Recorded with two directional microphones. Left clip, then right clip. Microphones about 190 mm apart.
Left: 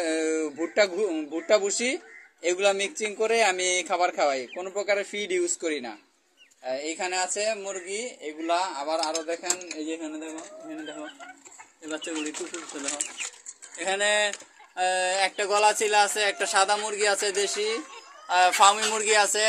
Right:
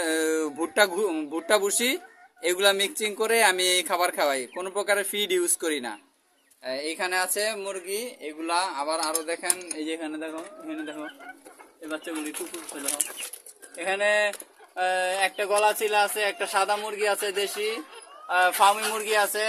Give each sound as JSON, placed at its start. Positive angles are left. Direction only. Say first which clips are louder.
{"t": 0.0, "sound": "speech", "louder": "right 1 dB", "side_deg": -25}
{"t": 9.0, "sound": "speech", "louder": "even", "side_deg": -35}
{"t": 13.7, "sound": "speech", "louder": "right 1 dB", "side_deg": 20}